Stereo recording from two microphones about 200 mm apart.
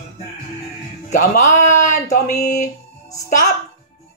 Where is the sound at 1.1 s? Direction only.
35° left (ahead or behind).